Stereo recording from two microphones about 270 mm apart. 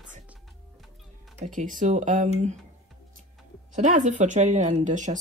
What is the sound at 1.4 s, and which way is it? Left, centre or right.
Speech, right.